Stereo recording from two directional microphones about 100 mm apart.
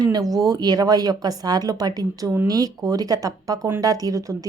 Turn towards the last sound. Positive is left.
turn(degrees=-35)  # may be behind; listen again after turning